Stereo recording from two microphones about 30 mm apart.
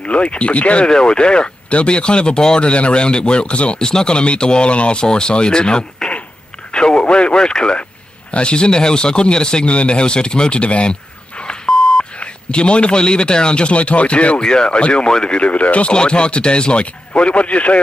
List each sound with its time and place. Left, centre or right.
0.0 s speech: left
0.8 s a man's voice: left
2.6 s a man's voice: left
3.7 s speech: left
6.7 s radio: left
8.3 s speech: left
9.7 s a sound: left
12.2 s a man's voice: left
14.4 s a man's voice: left
15.5 s speech: left
15.9 s a man's voice: left